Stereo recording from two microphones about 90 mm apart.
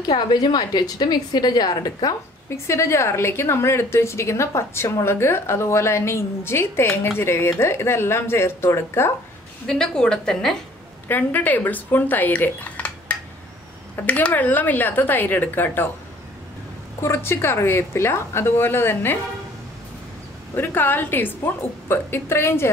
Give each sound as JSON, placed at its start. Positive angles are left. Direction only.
{"t": 0.1, "sound": "a woman's voice", "side_deg": 55}
{"t": 2.5, "sound": "a woman's voice", "side_deg": 30}
{"t": 9.7, "sound": "a woman's voice", "side_deg": 10}
{"t": 11.1, "sound": "a woman's voice", "side_deg": 20}
{"t": 17.0, "sound": "a woman's voice", "side_deg": 25}
{"t": 20.5, "sound": "a woman's voice", "side_deg": 25}